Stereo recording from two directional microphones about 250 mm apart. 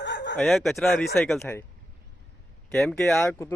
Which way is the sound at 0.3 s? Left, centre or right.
Centre.